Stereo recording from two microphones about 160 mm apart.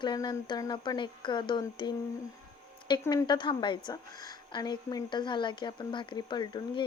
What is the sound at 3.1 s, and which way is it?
A woman's voice, 25° left (ahead or behind).